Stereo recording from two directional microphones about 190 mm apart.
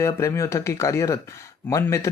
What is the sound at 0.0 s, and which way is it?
Speech, 15° left (ahead or behind).